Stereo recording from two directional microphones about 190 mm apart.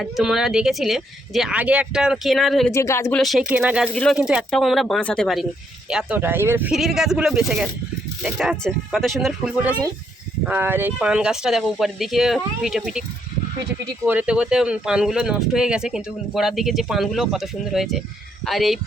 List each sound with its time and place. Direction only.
0.0 s speech: centre (ahead or behind)
2.7 s speech: 15° left (ahead or behind)
3.2 s speech: centre (ahead or behind)
14.1 s speech: 5° right (ahead or behind)